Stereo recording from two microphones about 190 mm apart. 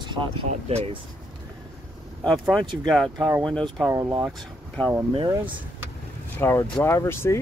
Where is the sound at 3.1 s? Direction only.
20° right (ahead or behind).